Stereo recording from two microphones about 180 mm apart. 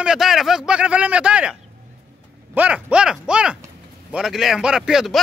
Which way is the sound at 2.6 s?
5° right (ahead or behind).